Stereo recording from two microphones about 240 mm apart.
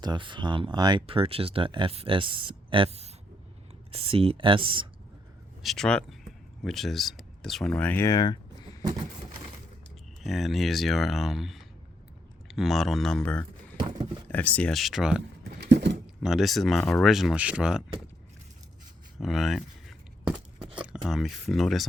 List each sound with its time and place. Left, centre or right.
0.0 s speech: centre
5.6 s speech: centre
10.2 s speech: centre
15.6 s a sound: right
16.2 s speech: centre
19.2 s a sound: centre
21.1 s speech: centre